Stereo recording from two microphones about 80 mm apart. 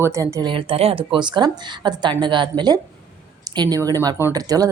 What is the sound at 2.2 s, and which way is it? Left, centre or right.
Speech, right.